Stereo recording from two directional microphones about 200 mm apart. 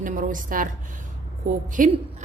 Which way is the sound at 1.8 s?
40° right (ahead or behind).